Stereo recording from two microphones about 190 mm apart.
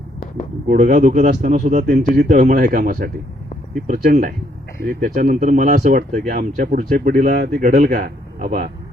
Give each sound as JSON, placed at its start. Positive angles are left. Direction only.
{"t": 0.7, "sound": "speech", "side_deg": -40}